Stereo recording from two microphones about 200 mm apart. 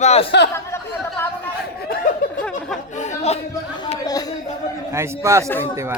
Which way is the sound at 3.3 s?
30° left (ahead or behind).